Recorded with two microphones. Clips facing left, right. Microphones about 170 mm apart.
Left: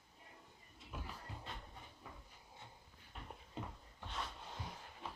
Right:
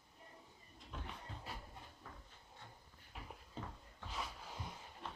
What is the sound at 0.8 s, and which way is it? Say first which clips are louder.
Cupboard open or close: even; 5° left (ahead or behind).